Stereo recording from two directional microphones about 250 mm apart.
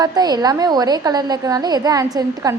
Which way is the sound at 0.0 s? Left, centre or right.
Centre.